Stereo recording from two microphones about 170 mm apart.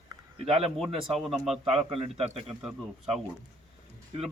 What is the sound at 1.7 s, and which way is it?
Speech, 35° right (ahead or behind).